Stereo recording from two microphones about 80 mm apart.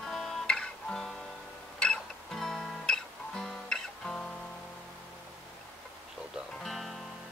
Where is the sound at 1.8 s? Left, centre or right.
Centre.